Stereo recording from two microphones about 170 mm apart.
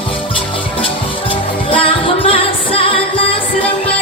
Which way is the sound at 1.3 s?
30° left (ahead or behind).